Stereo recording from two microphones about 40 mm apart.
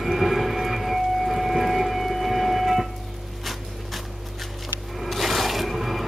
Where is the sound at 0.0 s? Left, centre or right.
Centre.